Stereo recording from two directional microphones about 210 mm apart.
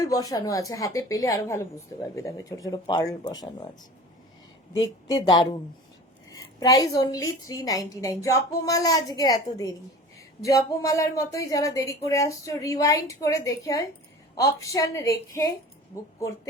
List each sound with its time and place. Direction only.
0.0 s a woman's voice: 15° left (ahead or behind)
4.7 s a woman's voice: 20° left (ahead or behind)